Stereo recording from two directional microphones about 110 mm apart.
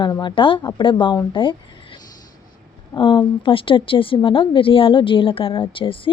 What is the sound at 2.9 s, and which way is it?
A woman's voice, 50° left (ahead or behind).